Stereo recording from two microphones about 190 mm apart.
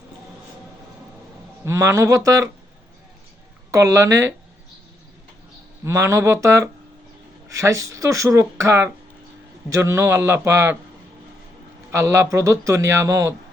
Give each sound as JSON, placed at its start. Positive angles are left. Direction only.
{"t": 1.6, "sound": "speech", "side_deg": -15}
{"t": 3.7, "sound": "speech", "side_deg": -15}
{"t": 5.8, "sound": "speech", "side_deg": -15}
{"t": 11.9, "sound": "speech", "side_deg": -15}